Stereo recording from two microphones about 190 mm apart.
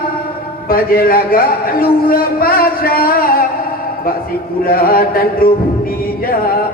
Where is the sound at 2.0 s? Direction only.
50° left (ahead or behind).